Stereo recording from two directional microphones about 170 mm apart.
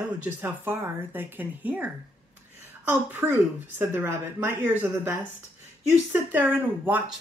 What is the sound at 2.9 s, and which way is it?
A woman's voice, 10° right (ahead or behind).